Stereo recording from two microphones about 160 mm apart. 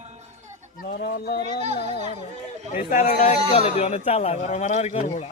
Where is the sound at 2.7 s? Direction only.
50° left (ahead or behind).